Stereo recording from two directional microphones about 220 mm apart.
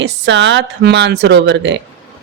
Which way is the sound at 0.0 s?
55° right (ahead or behind).